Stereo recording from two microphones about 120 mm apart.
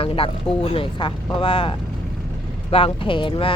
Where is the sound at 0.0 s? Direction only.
50° left (ahead or behind).